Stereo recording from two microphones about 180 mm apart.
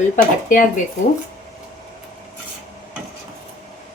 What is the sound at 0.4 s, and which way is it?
Speech, 45° left (ahead or behind).